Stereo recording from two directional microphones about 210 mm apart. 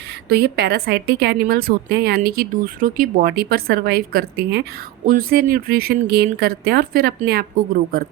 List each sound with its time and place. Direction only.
0.3 s a woman's voice: 50° right (ahead or behind)